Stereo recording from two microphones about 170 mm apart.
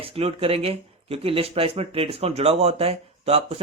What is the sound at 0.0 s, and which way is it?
A man's voice, 35° right (ahead or behind).